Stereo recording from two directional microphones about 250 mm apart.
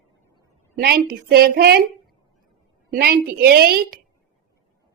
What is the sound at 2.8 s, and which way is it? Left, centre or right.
A woman's voice, right.